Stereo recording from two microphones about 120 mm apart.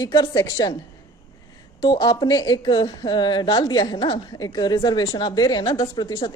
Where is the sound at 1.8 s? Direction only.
45° left (ahead or behind).